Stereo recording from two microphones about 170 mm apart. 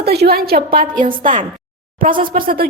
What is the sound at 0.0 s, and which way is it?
A woman's voice, 70° right (ahead or behind).